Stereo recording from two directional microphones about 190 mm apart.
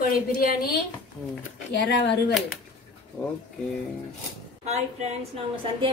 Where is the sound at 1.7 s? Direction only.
65° left (ahead or behind).